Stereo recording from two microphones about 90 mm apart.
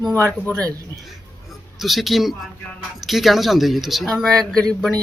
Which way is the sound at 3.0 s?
Centre (ahead or behind).